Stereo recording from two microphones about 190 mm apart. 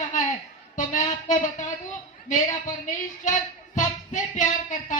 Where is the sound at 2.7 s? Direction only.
45° left (ahead or behind).